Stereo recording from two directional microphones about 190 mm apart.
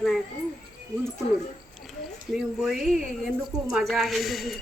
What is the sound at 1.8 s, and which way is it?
Speech, centre (ahead or behind).